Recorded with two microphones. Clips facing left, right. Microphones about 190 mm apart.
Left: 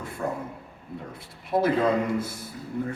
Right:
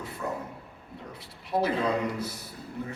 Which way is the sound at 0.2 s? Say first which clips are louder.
Left 3 dB; 55° left (ahead or behind).